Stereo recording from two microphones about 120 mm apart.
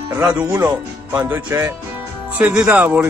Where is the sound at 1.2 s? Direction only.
20° right (ahead or behind).